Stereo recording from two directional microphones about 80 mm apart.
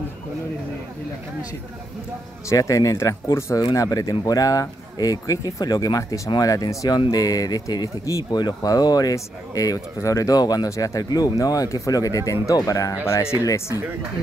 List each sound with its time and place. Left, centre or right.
2.5 s speech: left
3.5 s speech: left